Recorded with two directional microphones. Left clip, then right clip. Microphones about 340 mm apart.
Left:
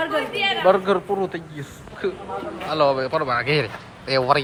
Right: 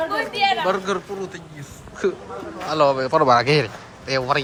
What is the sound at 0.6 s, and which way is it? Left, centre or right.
Speech, centre.